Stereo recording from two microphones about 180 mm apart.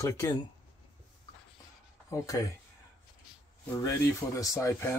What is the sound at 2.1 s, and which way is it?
Speech, 20° left (ahead or behind).